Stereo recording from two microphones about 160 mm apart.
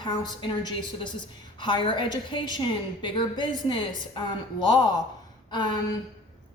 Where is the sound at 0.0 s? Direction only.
25° left (ahead or behind).